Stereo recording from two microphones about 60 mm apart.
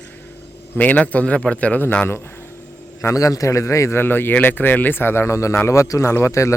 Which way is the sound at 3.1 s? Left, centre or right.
Left.